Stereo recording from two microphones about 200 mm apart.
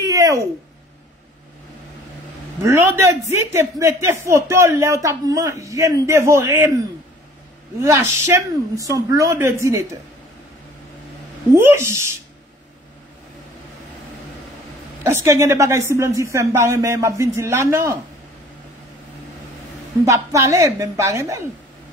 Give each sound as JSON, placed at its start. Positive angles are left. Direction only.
{"t": 0.0, "sound": "a sound", "side_deg": -15}
{"t": 2.6, "sound": "speech", "side_deg": -15}
{"t": 7.8, "sound": "speech", "side_deg": -15}
{"t": 11.5, "sound": "speech", "side_deg": -15}
{"t": 15.0, "sound": "speech", "side_deg": -15}
{"t": 20.1, "sound": "speech", "side_deg": -15}